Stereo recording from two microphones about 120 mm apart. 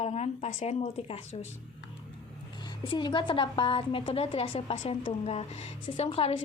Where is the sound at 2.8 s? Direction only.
40° left (ahead or behind).